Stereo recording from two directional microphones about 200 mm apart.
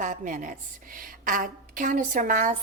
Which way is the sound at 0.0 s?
40° right (ahead or behind).